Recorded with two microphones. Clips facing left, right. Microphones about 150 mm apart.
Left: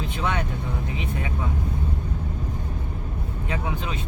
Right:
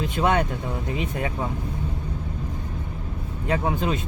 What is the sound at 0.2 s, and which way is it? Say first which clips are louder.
Speech: right 6 dB; 45° right (ahead or behind).